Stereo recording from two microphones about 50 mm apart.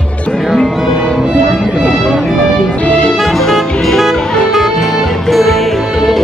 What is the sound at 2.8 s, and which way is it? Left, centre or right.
Music, left.